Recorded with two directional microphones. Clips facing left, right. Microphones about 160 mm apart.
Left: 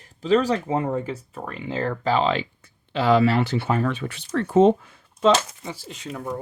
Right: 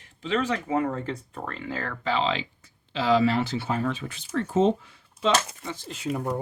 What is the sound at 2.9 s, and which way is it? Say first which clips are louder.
Speech: left 3 dB; 60° left (ahead or behind).